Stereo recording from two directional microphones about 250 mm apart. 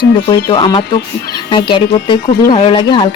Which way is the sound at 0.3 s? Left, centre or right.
Centre.